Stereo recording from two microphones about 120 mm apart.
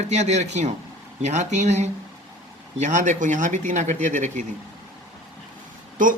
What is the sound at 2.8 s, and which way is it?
A man's voice, 90° right.